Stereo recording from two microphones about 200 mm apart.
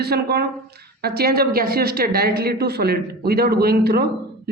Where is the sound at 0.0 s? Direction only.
55° right (ahead or behind).